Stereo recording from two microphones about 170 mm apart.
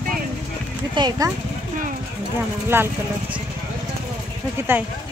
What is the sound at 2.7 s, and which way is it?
Speech, 15° right (ahead or behind).